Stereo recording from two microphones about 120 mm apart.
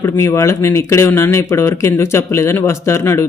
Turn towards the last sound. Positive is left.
turn(degrees=20)  # may be behind; listen again after turning